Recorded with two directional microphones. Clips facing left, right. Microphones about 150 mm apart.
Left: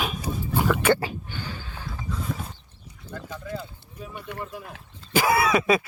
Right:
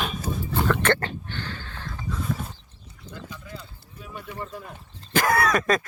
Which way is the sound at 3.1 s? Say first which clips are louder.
Left 6 dB; 50° left (ahead or behind).